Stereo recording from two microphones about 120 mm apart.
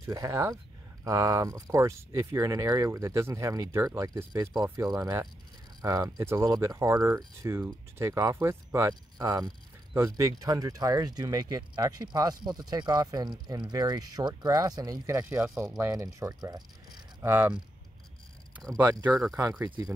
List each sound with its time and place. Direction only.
0.0 s speech: 25° right (ahead or behind)
17.2 s speech: 15° right (ahead or behind)
19.0 s speech: 5° right (ahead or behind)
19.5 s speech: 15° right (ahead or behind)